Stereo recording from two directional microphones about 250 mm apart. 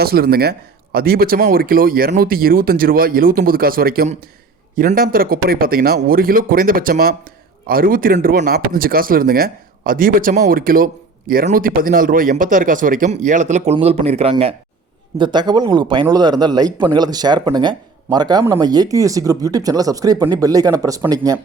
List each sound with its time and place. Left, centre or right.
0.0 s speech: right; by 21.3 s centre